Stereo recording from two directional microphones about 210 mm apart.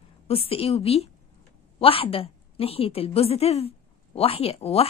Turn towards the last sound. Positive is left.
turn(degrees=30)  # may be behind; listen again after turning